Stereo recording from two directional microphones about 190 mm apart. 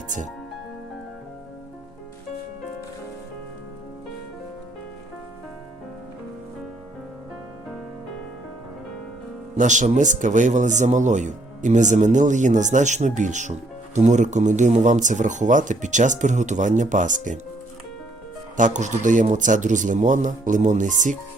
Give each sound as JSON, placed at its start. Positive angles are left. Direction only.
{"t": 9.6, "sound": "speech", "side_deg": -40}
{"t": 18.5, "sound": "speech", "side_deg": -40}